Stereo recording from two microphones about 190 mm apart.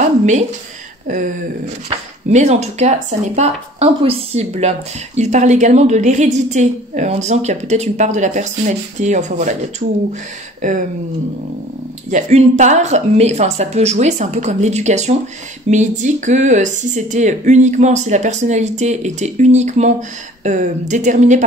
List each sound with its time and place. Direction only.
0.0 s a sound: 40° right (ahead or behind)
1.9 s speech: 35° right (ahead or behind)
12.1 s speech: 40° right (ahead or behind)